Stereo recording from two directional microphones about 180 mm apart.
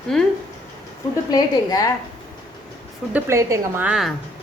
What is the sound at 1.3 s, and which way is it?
Speech, 20° left (ahead or behind).